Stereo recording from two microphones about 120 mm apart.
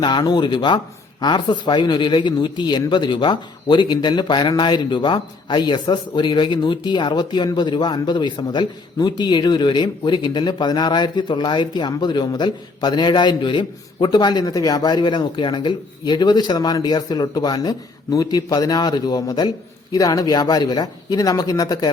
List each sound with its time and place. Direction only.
0.0 s speech: 35° left (ahead or behind)